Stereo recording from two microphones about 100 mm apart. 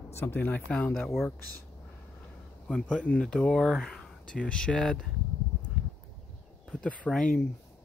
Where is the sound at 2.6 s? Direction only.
10° left (ahead or behind).